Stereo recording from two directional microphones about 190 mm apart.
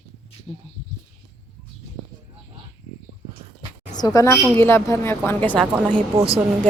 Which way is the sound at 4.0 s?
20° left (ahead or behind).